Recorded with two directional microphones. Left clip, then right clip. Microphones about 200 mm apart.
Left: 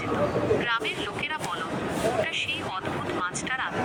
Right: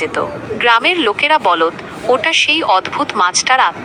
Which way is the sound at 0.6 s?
45° right (ahead or behind).